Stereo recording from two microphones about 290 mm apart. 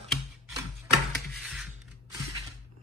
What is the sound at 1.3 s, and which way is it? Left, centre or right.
Music, centre.